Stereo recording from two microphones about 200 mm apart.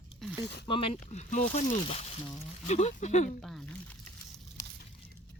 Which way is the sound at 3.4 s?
Centre (ahead or behind).